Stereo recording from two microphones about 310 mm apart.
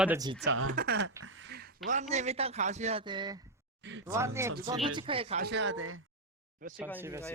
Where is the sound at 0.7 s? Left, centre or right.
Right.